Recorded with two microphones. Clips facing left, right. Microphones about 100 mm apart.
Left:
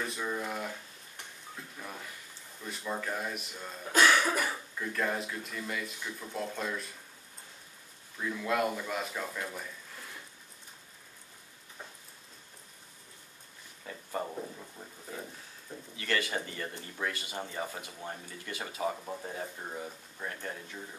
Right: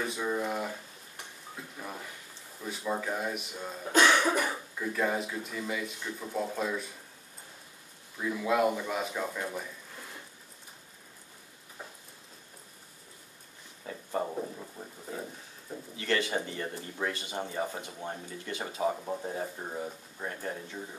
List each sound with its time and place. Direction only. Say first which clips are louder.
0.0 s a sound: right 3 dB; 5° right (ahead or behind)
2.6 s speech: right 3 dB; 5° right (ahead or behind)
3.9 s cough: right 1 dB; 20° right (ahead or behind)
4.2 s speech: right 3 dB; 10° right (ahead or behind)
8.2 s speech: right 3 dB; 10° right (ahead or behind)
13.8 s speech: right 3 dB; 15° right (ahead or behind)
16.4 s speech: right 3 dB; 15° right (ahead or behind)
17.1 s speech: right 3 dB; 5° left (ahead or behind)
17.4 s speech: right 5 dB; 15° right (ahead or behind)